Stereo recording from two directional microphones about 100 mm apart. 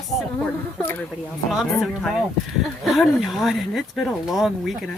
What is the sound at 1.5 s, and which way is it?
Speech, centre (ahead or behind).